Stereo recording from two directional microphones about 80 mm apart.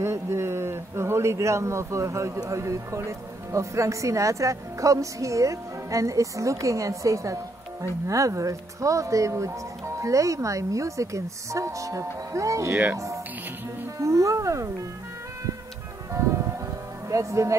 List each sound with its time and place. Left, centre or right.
0.0 s speech: right
13.9 s music: right
16.1 s music: right
17.1 s speech: right